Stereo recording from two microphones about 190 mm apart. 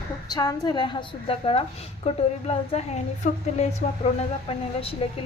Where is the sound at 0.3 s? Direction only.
20° left (ahead or behind).